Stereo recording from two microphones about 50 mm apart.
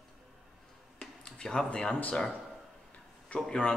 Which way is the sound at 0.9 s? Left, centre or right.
Centre.